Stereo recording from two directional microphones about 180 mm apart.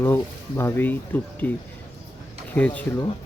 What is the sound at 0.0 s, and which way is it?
Speech, 10° left (ahead or behind).